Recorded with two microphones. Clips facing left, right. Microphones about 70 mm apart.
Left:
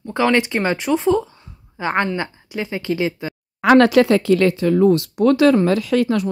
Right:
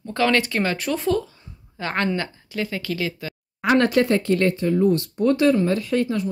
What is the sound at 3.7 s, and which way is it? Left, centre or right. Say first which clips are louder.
Speech: left 6 dB; left.